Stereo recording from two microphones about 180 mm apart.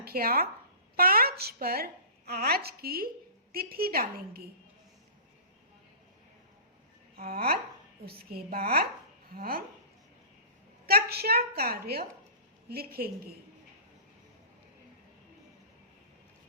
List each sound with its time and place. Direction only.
0.0 s a woman's voice: 55° right (ahead or behind)
7.2 s a woman's voice: 55° right (ahead or behind)
10.8 s a woman's voice: 60° right (ahead or behind)